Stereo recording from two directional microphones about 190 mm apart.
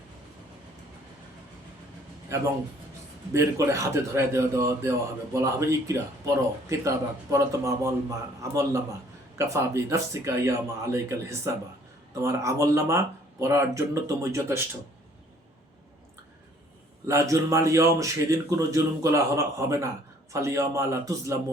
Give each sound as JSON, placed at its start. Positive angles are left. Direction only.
{"t": 2.3, "sound": "a man's voice", "side_deg": -15}
{"t": 17.1, "sound": "a man's voice", "side_deg": -15}